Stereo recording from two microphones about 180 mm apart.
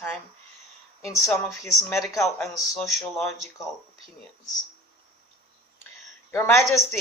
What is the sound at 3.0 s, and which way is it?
Speech, centre (ahead or behind).